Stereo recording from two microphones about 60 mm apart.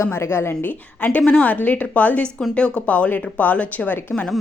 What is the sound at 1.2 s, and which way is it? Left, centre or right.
Speech, centre.